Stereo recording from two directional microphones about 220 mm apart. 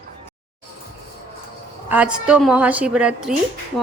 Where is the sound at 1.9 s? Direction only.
5° right (ahead or behind).